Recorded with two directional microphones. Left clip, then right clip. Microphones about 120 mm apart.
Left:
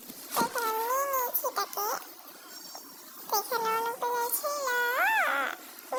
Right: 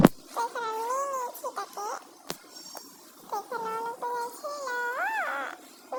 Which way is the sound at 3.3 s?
20° left (ahead or behind).